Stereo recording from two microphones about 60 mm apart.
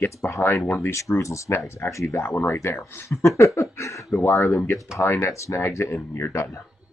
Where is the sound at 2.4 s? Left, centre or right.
Left.